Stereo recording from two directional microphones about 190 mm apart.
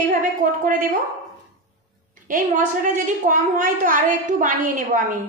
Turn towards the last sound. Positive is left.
turn(degrees=-45)  # may be behind; listen again after turning